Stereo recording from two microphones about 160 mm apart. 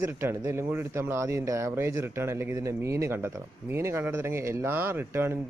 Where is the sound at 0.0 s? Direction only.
15° right (ahead or behind).